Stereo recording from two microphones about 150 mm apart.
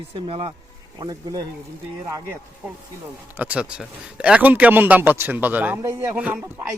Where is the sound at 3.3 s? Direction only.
10° right (ahead or behind).